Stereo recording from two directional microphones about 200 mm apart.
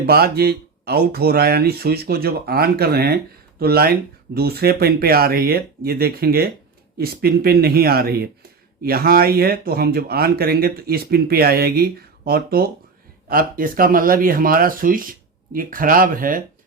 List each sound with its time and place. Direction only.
0.0 s speech: 50° right (ahead or behind)